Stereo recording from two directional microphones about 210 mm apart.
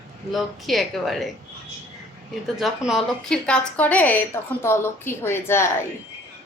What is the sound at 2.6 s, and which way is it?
A woman's voice, centre (ahead or behind).